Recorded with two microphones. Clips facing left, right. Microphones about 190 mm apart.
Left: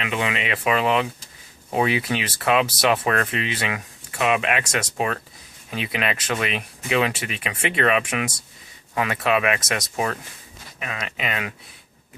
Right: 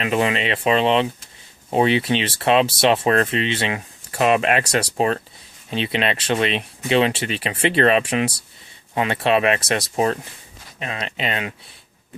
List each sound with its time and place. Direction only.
0.0 s speech: 35° right (ahead or behind)